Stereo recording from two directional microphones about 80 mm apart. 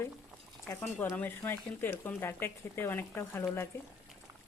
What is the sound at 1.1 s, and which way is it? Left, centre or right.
Speech, left.